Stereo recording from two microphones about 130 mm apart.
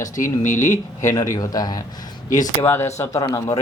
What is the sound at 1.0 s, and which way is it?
Speech, 25° left (ahead or behind).